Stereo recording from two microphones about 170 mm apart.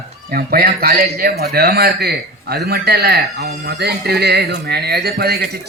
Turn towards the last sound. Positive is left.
turn(degrees=-65)  # may be behind; listen again after turning